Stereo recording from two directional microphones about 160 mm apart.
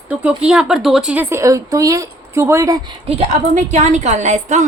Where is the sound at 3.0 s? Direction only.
40° right (ahead or behind).